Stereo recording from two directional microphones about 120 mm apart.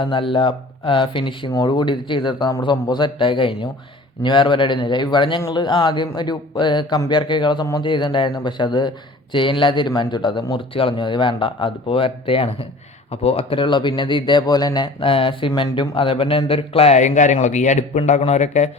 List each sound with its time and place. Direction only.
0.0 s speech: 45° left (ahead or behind)
15.0 s a man's voice: 50° left (ahead or behind); by 18.7 s 75° left (ahead or behind)